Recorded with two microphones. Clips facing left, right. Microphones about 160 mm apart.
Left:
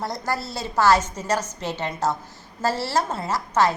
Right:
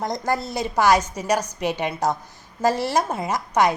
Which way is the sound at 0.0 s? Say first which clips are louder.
Right 3 dB; 20° right (ahead or behind).